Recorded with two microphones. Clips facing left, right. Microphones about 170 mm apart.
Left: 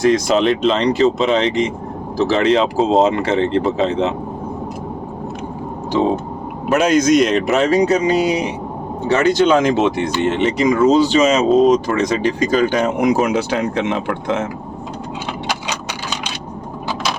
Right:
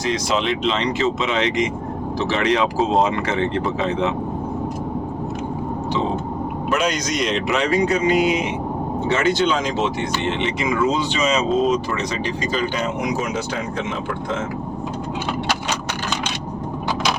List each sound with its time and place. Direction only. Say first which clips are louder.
0.0 s speech: left 7 dB; 50° left (ahead or behind); by 4.1 s 30° left (ahead or behind)
6.7 s speech: left 11 dB; 50° left (ahead or behind); by 8.4 s 35° left (ahead or behind)
9.3 s speech: left 7 dB; 50° left (ahead or behind); by 14.4 s 75° left (ahead or behind)